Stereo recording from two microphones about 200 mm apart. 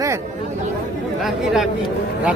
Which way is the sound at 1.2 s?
Centre (ahead or behind).